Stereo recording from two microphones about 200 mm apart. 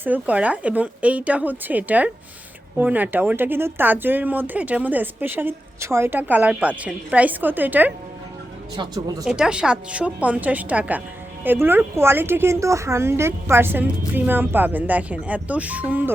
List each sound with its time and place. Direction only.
0.0 s speech: 5° right (ahead or behind)
8.7 s speech: 20° right (ahead or behind)
9.2 s speech: 5° right (ahead or behind)